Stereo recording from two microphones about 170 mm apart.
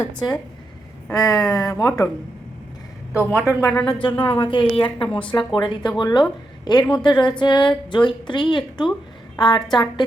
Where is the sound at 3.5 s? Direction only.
15° left (ahead or behind).